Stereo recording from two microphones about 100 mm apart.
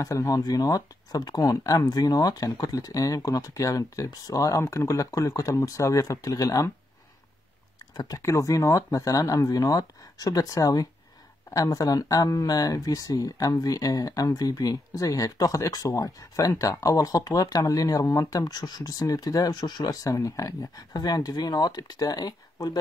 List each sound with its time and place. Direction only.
0.0 s speech: 35° left (ahead or behind)
7.9 s speech: 40° left (ahead or behind)
8.2 s speech: 30° left (ahead or behind)